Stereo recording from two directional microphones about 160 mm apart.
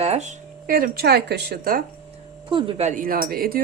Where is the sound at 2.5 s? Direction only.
30° right (ahead or behind); by 3.6 s 65° right (ahead or behind).